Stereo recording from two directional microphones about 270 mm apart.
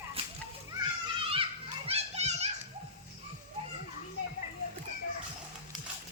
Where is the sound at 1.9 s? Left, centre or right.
Right.